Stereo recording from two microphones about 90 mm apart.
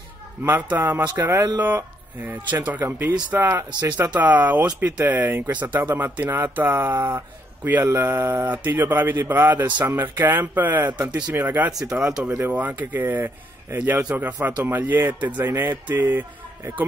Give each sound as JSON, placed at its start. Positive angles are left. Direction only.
{"t": 0.4, "sound": "speech", "side_deg": -20}
{"t": 2.8, "sound": "speech", "side_deg": -30}